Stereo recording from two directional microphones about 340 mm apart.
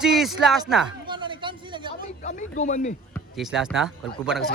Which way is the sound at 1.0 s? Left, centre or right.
Centre.